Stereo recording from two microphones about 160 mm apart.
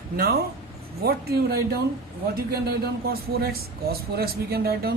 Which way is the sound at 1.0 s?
70° right (ahead or behind).